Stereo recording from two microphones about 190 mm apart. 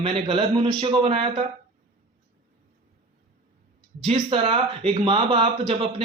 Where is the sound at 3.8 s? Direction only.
30° right (ahead or behind).